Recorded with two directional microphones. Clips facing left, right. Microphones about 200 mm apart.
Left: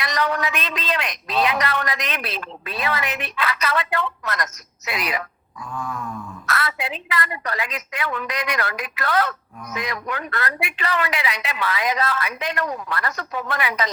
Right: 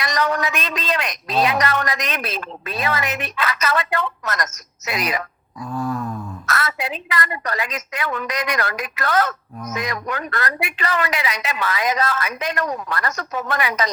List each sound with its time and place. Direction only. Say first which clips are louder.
0.0 s a man's voice: right 2 dB; 45° right (ahead or behind)